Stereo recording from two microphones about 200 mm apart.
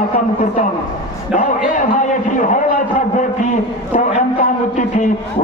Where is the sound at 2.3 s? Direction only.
40° left (ahead or behind).